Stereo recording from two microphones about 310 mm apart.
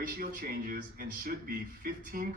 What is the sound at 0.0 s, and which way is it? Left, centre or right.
A woman's voice, right.